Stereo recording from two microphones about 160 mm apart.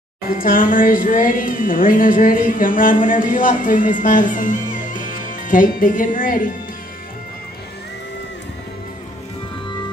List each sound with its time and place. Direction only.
0.3 s speech: 60° left (ahead or behind)